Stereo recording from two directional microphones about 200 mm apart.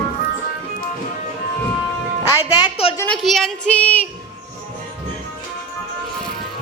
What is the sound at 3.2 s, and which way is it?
Child singing, centre (ahead or behind).